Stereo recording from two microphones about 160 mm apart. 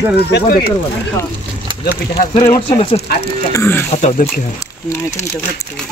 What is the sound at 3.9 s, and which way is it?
Speech, 45° left (ahead or behind).